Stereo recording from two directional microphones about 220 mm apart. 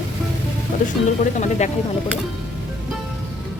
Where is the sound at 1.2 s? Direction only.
30° left (ahead or behind).